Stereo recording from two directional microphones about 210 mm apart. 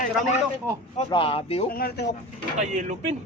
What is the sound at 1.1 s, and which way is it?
Speech, 25° left (ahead or behind).